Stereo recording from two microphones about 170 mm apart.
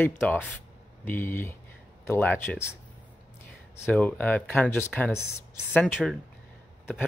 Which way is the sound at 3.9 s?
5° left (ahead or behind).